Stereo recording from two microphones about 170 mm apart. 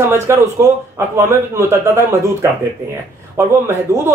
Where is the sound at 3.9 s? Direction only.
15° right (ahead or behind).